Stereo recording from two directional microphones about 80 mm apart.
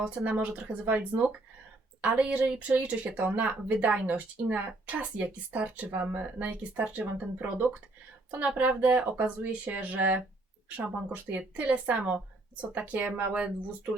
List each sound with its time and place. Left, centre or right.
0.0 s speech: centre